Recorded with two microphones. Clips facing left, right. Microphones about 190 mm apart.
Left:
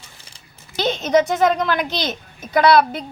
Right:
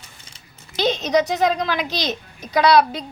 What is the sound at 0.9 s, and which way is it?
A woman's voice, 55° left (ahead or behind).